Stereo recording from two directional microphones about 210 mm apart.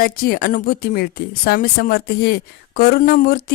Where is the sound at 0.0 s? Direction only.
45° left (ahead or behind).